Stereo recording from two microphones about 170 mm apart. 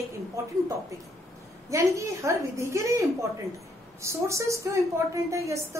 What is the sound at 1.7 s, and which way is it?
A woman's voice, 15° right (ahead or behind).